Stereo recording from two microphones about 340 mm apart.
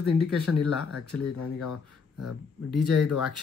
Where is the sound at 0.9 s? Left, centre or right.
Left.